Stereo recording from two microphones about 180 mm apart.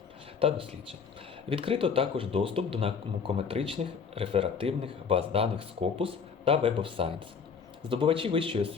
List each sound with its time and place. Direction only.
0.3 s speech: 30° right (ahead or behind)